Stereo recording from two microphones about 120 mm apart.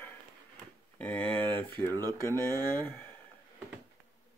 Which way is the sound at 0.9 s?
10° left (ahead or behind).